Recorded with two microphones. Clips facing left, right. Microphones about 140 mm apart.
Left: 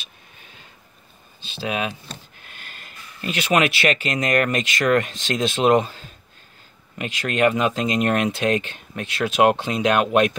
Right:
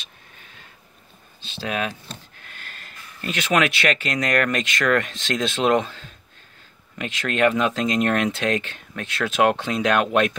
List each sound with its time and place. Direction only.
1.4 s speech: 5° left (ahead or behind)
5.5 s speech: 10° left (ahead or behind)
7.0 s speech: 10° left (ahead or behind)
8.5 s speech: 20° left (ahead or behind)